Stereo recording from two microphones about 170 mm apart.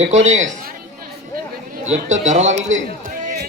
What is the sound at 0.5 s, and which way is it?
Chatter, 55° right (ahead or behind).